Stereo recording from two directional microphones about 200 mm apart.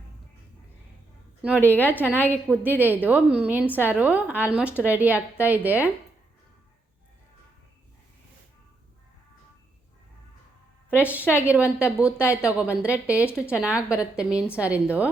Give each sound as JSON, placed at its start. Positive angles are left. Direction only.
{"t": 1.4, "sound": "a woman's voice", "side_deg": -5}
{"t": 10.8, "sound": "a woman's voice", "side_deg": -5}
{"t": 13.2, "sound": "speech", "side_deg": 10}
{"t": 13.5, "sound": "a woman's voice", "side_deg": -5}